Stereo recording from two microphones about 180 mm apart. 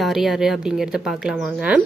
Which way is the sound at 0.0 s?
Centre (ahead or behind).